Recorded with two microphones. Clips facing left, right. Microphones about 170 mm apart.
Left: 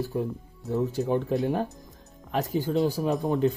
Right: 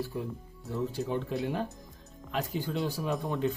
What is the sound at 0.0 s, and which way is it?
Speech, 45° left (ahead or behind).